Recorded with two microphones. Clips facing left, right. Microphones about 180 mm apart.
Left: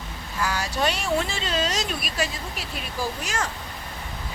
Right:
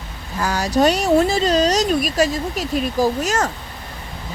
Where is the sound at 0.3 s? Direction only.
40° right (ahead or behind).